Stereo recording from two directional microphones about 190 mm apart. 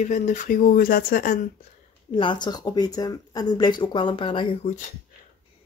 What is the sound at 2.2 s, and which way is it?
Speech, 25° left (ahead or behind).